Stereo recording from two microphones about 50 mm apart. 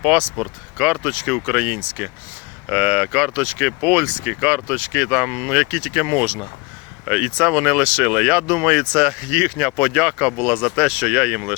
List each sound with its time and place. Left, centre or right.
0.0 s speech: right
0.8 s speech: centre
1.1 s speech: right
2.6 s speech: right
6.1 s speech: right
7.0 s speech: right